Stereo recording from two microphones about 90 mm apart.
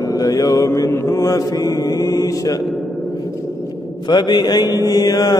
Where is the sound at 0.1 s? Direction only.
45° left (ahead or behind).